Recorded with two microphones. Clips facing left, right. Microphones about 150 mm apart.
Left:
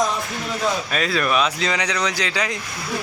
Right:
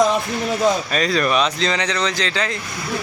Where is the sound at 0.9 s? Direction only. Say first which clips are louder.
Right 2 dB; 5° left (ahead or behind).